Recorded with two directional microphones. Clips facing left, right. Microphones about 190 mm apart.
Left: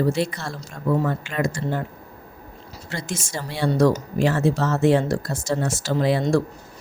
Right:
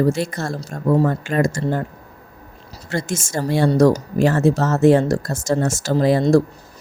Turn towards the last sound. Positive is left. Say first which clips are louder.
# right 5 dB
turn(degrees=-40)  # may be behind; listen again after turning